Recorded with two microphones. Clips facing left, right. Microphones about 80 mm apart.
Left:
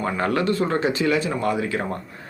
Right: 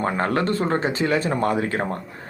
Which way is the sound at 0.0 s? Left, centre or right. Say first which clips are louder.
Even; right.